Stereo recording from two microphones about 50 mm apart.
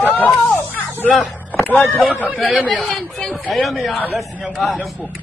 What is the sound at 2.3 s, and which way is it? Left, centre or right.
Speech, centre.